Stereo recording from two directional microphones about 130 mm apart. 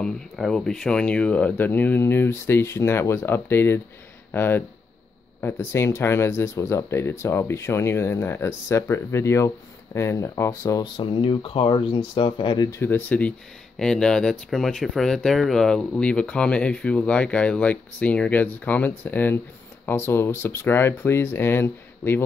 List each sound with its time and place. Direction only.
0.0 s speech: 5° left (ahead or behind); by 12.6 s 40° left (ahead or behind)
12.6 s speech: 20° left (ahead or behind)